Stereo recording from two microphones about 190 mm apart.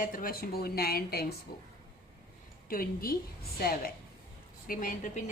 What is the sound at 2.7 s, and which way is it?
A woman's voice, 50° left (ahead or behind).